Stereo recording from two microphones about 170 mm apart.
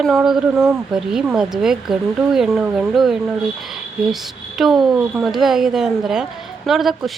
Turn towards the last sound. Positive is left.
turn(degrees=0)  # may be behind; listen again after turning